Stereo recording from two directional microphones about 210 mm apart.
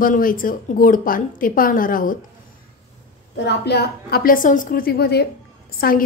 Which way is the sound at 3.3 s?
50° left (ahead or behind).